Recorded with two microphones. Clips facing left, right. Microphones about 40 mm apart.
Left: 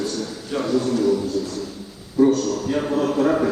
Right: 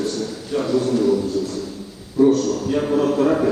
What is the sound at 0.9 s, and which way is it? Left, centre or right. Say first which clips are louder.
Speech: right 2 dB; centre.